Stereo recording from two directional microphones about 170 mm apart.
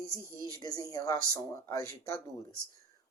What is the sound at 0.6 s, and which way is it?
Speech, 20° left (ahead or behind).